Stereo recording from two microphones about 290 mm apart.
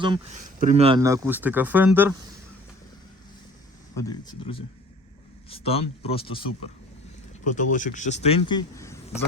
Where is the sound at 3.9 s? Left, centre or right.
Centre.